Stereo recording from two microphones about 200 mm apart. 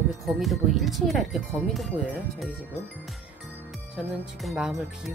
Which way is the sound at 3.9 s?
Centre (ahead or behind).